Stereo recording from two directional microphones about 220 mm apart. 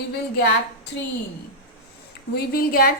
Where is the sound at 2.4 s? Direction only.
40° left (ahead or behind).